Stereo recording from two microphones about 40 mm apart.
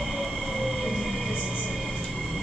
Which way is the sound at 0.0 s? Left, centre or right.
Centre.